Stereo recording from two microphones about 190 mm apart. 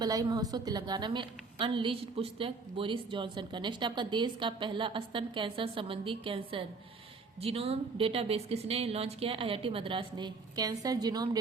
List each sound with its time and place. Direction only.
0.0 s a woman's voice: 20° right (ahead or behind)